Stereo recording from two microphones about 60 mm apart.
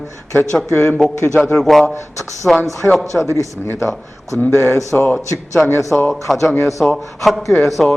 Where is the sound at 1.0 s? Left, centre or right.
Centre.